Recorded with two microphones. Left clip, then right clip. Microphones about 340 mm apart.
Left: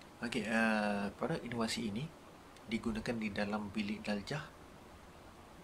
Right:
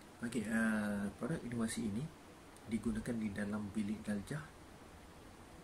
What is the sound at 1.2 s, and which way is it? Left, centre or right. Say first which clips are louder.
Speech: left 4 dB; left.